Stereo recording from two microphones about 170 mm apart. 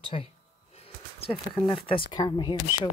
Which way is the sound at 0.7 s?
35° left (ahead or behind).